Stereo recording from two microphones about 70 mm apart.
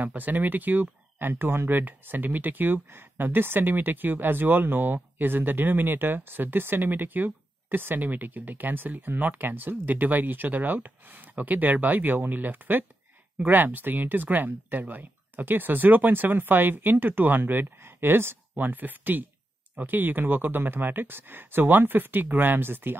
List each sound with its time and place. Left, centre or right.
0.0 s speech: right
1.3 s speech: right